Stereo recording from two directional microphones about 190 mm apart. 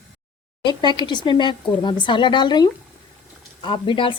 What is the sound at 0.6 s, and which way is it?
Speech, 25° left (ahead or behind).